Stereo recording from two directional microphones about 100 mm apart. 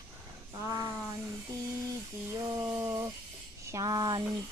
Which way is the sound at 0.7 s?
35° right (ahead or behind).